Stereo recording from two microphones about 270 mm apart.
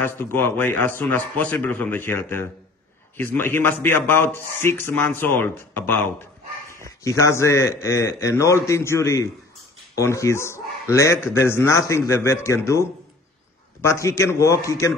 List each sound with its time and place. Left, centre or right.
0.0 s a man's voice: centre